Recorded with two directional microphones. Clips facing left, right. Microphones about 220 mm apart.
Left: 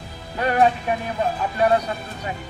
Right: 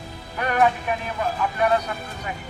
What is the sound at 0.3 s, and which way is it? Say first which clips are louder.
Speech: left 2 dB; 30° left (ahead or behind).